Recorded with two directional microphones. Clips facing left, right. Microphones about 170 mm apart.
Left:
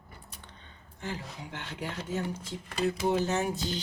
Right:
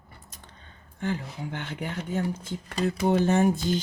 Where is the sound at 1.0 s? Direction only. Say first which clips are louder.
Right 8 dB; 55° right (ahead or behind).